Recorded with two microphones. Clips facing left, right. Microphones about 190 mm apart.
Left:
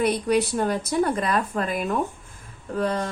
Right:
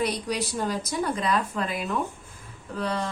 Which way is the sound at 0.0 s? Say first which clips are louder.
Left 6 dB; 55° left (ahead or behind).